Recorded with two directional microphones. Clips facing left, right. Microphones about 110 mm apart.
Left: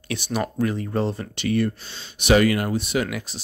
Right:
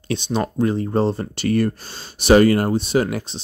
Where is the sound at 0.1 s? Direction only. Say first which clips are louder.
Right 4 dB; 25° right (ahead or behind).